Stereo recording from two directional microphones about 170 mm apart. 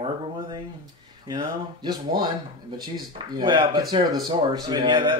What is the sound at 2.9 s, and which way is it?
Speech, 25° right (ahead or behind).